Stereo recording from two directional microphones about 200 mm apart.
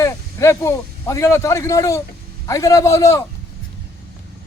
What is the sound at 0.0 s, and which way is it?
A man's voice, 15° left (ahead or behind).